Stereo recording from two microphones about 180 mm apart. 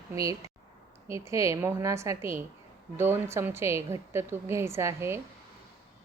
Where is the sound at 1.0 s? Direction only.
15° right (ahead or behind).